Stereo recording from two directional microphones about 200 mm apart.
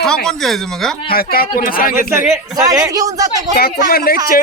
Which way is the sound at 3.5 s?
50° left (ahead or behind).